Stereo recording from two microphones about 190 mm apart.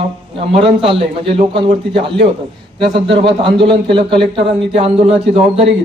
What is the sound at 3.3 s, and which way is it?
A man's voice, 25° right (ahead or behind).